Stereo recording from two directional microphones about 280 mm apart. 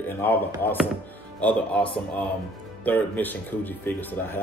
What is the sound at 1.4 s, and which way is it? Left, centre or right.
Speech, centre.